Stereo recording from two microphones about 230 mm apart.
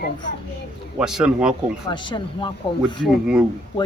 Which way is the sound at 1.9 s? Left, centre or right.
Centre.